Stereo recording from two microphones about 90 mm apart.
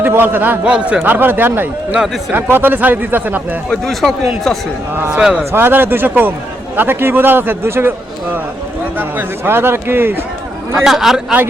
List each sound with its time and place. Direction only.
0.0 s a man's voice: 25° right (ahead or behind)
3.7 s speech: 5° left (ahead or behind)
5.1 s speech: 10° right (ahead or behind)
5.5 s a man's voice: 25° right (ahead or behind)
10.8 s speech: 5° right (ahead or behind)